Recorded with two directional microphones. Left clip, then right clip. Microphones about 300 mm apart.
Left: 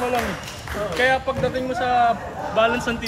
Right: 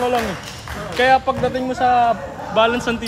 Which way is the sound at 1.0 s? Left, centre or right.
Right.